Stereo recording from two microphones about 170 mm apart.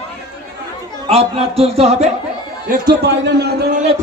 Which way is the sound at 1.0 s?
35° right (ahead or behind).